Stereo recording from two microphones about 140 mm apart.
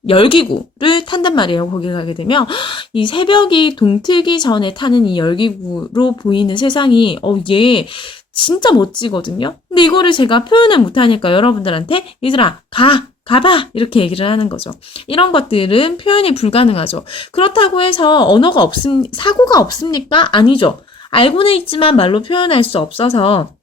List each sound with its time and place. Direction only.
0.1 s speech: 40° left (ahead or behind)